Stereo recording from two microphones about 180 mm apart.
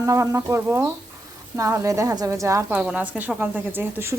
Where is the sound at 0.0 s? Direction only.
15° right (ahead or behind).